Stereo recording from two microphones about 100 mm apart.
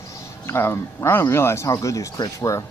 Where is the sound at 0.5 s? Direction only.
25° left (ahead or behind).